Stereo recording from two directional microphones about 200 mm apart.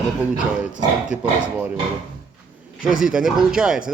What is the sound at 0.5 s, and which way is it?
A man's voice, 5° right (ahead or behind).